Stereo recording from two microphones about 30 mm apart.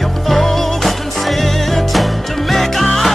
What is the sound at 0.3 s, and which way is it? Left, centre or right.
Music, centre.